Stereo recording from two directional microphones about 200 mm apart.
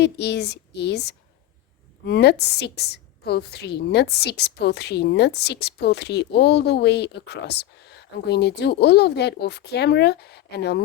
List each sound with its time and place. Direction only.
0.0 s a woman's voice: 55° left (ahead or behind)